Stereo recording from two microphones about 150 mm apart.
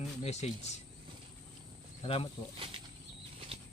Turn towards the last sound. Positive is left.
turn(degrees=-35)  # may be behind; listen again after turning